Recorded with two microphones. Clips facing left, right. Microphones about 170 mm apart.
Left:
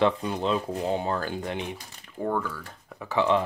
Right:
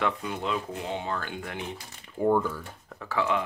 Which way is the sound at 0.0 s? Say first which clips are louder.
Left 5 dB; 30° left (ahead or behind).